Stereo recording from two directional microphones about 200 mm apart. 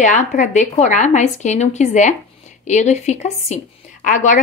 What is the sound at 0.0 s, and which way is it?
Speech, 40° left (ahead or behind).